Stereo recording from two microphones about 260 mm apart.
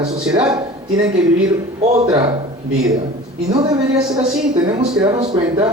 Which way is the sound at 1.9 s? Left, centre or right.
Centre.